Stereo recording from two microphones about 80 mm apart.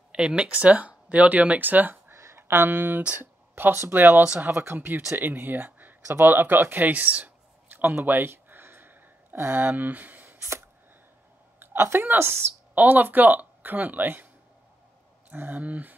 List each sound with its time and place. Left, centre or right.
0.1 s speech: centre
4.2 s speech: centre
4.5 s speech: right
7.9 s a sound: right
11.6 s a woman's voice: right
12.7 s speech: right